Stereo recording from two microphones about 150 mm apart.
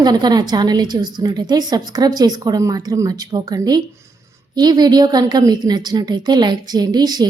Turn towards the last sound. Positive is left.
turn(degrees=-25)  # may be behind; listen again after turning